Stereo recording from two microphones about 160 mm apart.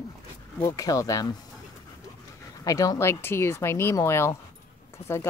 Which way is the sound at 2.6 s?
20° left (ahead or behind).